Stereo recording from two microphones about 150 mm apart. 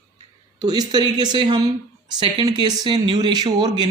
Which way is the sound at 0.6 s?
25° right (ahead or behind).